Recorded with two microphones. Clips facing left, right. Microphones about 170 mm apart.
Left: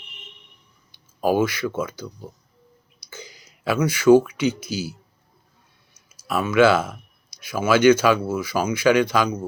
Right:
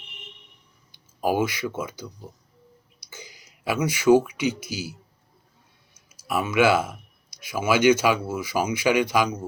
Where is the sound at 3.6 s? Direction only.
15° right (ahead or behind).